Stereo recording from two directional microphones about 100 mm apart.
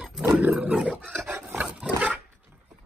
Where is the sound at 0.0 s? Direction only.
10° right (ahead or behind).